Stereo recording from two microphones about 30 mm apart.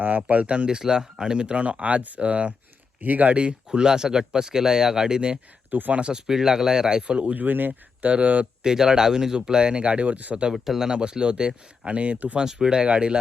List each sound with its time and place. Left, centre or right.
0.3 s speech: right
0.8 s speech: right
3.0 s speech: right
3.3 s speech: right
5.7 s speech: right
6.1 s speech: right
7.3 s speech: right
8.0 s speech: right
8.6 s speech: right
9.8 s speech: right
10.5 s speech: centre
10.8 s speech: right
12.5 s speech: right
12.8 s speech: right